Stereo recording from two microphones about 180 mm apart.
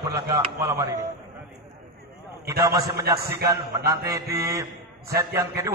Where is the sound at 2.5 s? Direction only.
15° right (ahead or behind).